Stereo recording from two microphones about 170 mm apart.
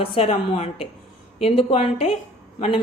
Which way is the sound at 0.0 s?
35° left (ahead or behind).